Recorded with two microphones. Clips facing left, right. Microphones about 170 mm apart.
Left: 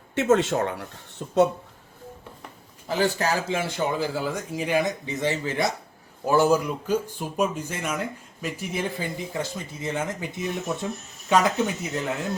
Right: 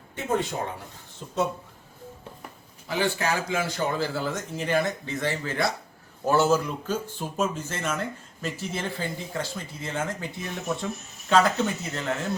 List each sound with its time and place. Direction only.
0.1 s speech: 80° left
1.2 s speech: 55° left (ahead or behind)
3.0 s a man's voice: 40° left (ahead or behind)
3.4 s speech: 25° left (ahead or behind)